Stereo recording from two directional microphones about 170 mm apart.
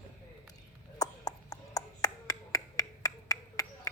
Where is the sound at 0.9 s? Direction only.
20° left (ahead or behind).